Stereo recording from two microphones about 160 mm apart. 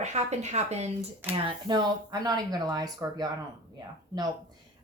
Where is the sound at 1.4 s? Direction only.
25° right (ahead or behind).